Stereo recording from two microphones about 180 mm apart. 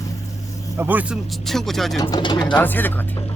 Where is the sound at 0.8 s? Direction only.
10° right (ahead or behind).